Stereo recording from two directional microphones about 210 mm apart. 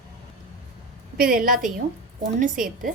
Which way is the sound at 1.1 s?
45° right (ahead or behind).